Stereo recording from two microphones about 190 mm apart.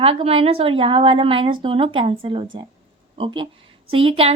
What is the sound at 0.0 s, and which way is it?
A woman's voice, 30° right (ahead or behind).